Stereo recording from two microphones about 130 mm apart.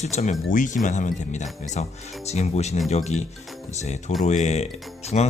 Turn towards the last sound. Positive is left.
turn(degrees=60)  # may be behind; listen again after turning